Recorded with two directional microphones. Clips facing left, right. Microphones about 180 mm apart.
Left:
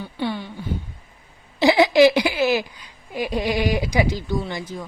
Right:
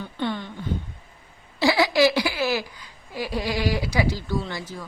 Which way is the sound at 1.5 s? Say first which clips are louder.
Left 5 dB; 20° left (ahead or behind).